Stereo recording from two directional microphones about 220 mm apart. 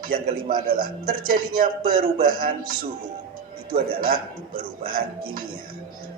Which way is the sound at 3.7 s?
40° right (ahead or behind).